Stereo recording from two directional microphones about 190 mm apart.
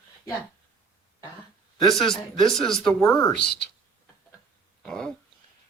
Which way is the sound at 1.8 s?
Centre (ahead or behind).